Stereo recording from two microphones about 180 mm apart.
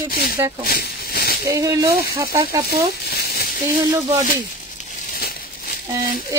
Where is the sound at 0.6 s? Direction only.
55° left (ahead or behind).